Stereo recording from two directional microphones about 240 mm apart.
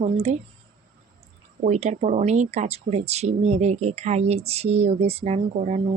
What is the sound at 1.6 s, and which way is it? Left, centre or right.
Speech, right.